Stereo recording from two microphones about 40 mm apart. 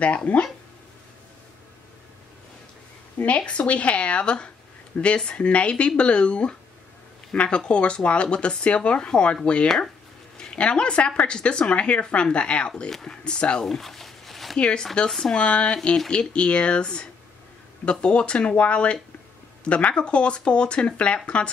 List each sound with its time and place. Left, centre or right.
0.0 s speech: left
3.2 s speech: left
12.9 s speech: centre
13.2 s speech: left
13.7 s zipper: centre
14.6 s speech: left